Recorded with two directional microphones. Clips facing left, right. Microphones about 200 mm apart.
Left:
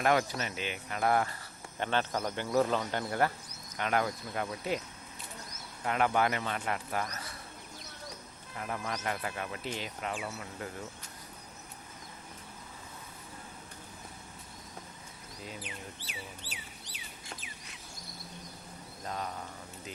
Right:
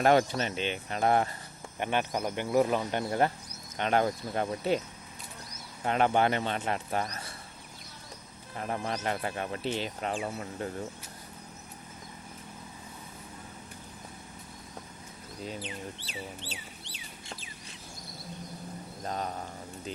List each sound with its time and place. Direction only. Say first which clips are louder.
0.0 s a man's voice: right 5 dB; 30° right (ahead or behind)
1.8 s speech: right 2 dB; 15° right (ahead or behind); by 4.8 s 30° right (ahead or behind)
5.8 s a man's voice: right 3 dB; 30° right (ahead or behind)
8.5 s a man's voice: right 4 dB; 35° right (ahead or behind)
15.5 s speech: right 5 dB; 30° right (ahead or behind)
19.0 s a sound: right 3 dB; 35° right (ahead or behind)